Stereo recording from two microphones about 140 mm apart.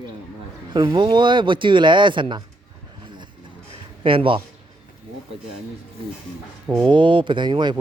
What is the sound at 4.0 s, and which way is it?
Speech, 40° right (ahead or behind).